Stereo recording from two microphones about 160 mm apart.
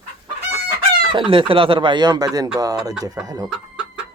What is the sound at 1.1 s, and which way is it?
Speech, 35° right (ahead or behind).